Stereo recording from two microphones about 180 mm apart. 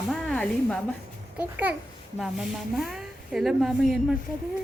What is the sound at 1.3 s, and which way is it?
A child's voice, 10° right (ahead or behind).